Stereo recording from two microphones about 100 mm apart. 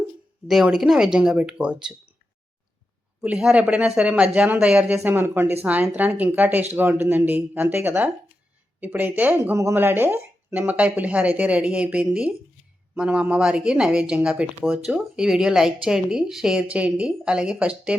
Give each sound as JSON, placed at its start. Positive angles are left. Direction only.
{"t": 0.4, "sound": "speech", "side_deg": -5}
{"t": 3.2, "sound": "speech", "side_deg": -10}